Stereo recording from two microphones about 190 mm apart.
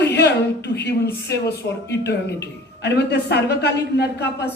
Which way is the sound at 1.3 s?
60° left (ahead or behind).